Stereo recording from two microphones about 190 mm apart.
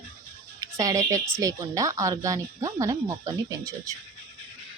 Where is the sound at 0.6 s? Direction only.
20° right (ahead or behind).